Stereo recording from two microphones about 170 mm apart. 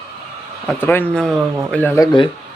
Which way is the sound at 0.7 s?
10° left (ahead or behind).